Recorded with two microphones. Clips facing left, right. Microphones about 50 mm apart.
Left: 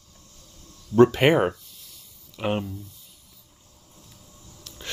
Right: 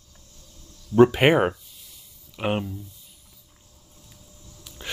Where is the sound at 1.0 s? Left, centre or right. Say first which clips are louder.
Right 1 dB; centre.